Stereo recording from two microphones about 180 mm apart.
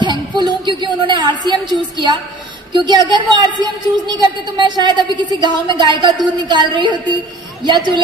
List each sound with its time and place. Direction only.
0.0 s music: 25° right (ahead or behind)
0.8 s a woman's voice: 25° right (ahead or behind)
2.7 s a woman's voice: 25° right (ahead or behind)